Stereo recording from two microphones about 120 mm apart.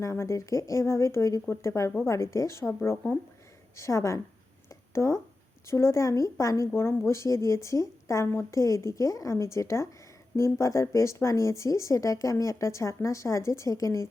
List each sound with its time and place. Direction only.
0.0 s a woman's voice: 25° left (ahead or behind)
4.7 s a sound: 25° left (ahead or behind)
5.6 s a woman's voice: 25° left (ahead or behind)